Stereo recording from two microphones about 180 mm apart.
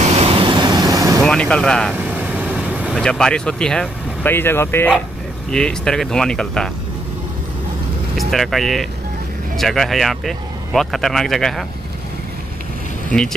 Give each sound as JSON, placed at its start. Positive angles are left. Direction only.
{"t": 0.0, "sound": "vehicle", "side_deg": -35}
{"t": 1.2, "sound": "speech", "side_deg": 5}
{"t": 2.0, "sound": "vehicle", "side_deg": -10}
{"t": 3.0, "sound": "speech", "side_deg": 5}
{"t": 8.2, "sound": "speech", "side_deg": 0}